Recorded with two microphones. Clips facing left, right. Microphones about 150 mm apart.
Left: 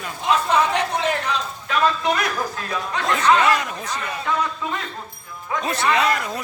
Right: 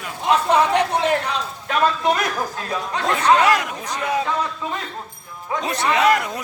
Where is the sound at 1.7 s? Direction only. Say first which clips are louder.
Right 1 dB; 45° right (ahead or behind).